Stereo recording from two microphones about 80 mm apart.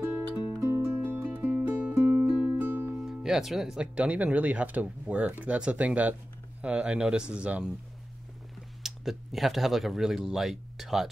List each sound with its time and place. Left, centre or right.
0.6 s music: right
3.1 s speech: centre
8.8 s speech: centre